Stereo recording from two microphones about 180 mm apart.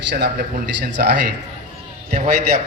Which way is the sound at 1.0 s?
55° right (ahead or behind).